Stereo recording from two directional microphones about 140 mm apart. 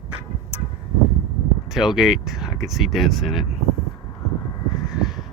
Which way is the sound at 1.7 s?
5° right (ahead or behind).